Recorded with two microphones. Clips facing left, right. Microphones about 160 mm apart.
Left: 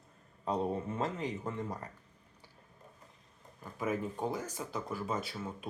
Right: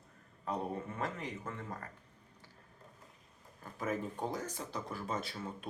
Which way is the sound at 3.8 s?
10° left (ahead or behind).